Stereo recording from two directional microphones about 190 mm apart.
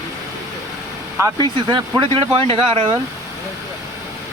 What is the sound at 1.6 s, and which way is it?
Speech, 25° right (ahead or behind).